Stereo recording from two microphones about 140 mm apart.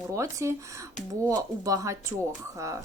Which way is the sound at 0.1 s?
20° right (ahead or behind).